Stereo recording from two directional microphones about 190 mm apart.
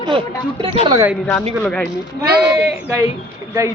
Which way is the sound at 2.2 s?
55° right (ahead or behind).